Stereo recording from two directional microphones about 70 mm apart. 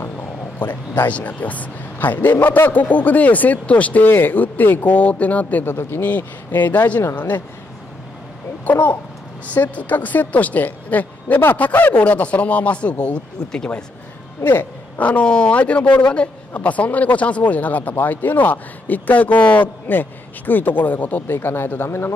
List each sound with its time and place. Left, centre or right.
0.6 s speech: left
8.6 s speech: left
14.4 s speech: left